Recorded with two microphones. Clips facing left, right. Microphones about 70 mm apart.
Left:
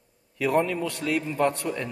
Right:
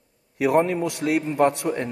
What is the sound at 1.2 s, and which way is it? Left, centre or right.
Speech, right.